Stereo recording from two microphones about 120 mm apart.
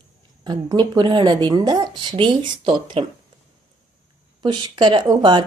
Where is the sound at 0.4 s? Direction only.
35° right (ahead or behind).